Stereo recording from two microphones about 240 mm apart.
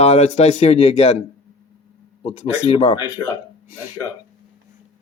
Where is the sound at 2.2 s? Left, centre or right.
Left.